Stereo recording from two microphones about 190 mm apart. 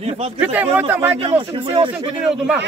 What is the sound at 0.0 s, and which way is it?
Speech, 35° right (ahead or behind).